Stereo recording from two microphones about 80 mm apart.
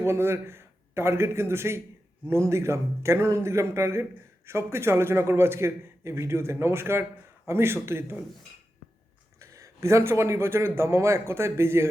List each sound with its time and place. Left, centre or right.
0.0 s a man's voice: right
9.4 s a man's voice: right